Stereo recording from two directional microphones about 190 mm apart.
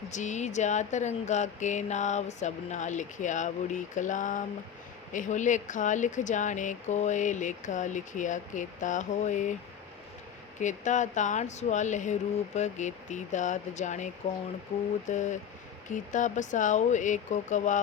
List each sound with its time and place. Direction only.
0.1 s speech: 40° left (ahead or behind)
10.6 s speech: 40° left (ahead or behind)
15.1 s speech: 40° left (ahead or behind)